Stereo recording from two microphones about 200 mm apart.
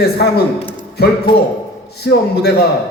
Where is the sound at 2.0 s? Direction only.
55° left (ahead or behind).